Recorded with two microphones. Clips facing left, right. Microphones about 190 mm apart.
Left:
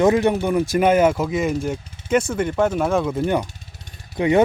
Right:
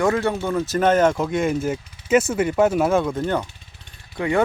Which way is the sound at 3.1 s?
10° left (ahead or behind).